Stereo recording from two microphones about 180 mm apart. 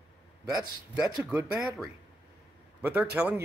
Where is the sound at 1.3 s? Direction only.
5° right (ahead or behind).